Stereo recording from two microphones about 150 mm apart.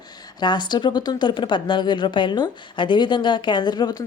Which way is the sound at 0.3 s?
30° left (ahead or behind).